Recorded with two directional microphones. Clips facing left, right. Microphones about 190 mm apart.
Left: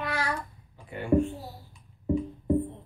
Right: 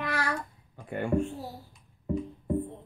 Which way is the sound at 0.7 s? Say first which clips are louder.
Right 5 dB; 50° right (ahead or behind).